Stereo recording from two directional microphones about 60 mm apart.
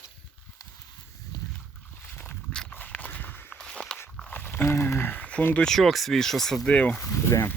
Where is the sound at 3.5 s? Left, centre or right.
Centre.